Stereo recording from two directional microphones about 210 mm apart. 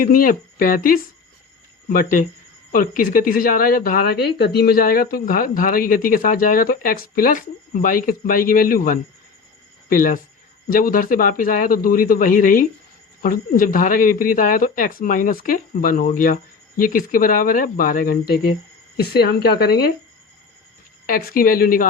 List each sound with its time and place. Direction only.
0.0 s speech: 40° left (ahead or behind)
21.1 s speech: 45° left (ahead or behind)